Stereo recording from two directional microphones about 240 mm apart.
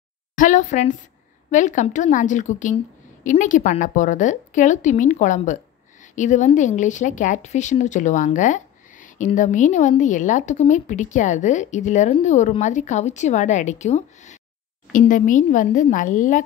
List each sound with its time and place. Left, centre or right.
0.4 s speech: left